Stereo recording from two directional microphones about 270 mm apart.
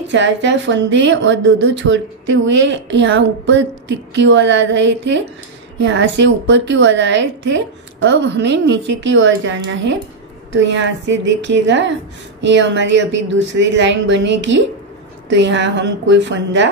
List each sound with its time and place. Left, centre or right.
0.1 s a woman's voice: right